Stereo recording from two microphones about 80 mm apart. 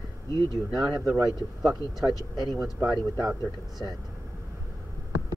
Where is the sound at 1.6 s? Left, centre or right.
Centre.